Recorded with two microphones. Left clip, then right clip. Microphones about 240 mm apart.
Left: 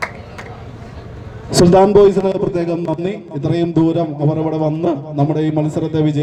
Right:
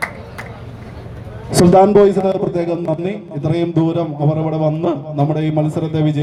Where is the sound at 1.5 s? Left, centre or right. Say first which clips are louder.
Even; left.